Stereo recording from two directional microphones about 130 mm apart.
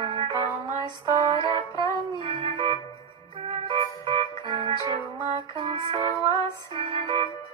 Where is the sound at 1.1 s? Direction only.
50° right (ahead or behind).